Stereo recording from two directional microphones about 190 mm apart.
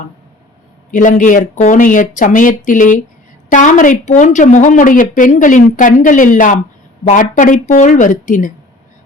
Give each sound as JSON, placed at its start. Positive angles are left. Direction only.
{"t": 0.9, "sound": "a woman's voice", "side_deg": 40}